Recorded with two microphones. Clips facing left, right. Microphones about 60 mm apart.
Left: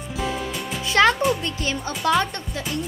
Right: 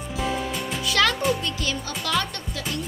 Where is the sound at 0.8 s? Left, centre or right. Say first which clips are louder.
Left 5 dB; left.